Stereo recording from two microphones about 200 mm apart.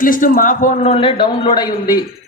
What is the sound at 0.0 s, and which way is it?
Speech, 45° left (ahead or behind).